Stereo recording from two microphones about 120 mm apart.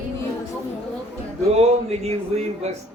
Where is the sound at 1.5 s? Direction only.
65° right (ahead or behind).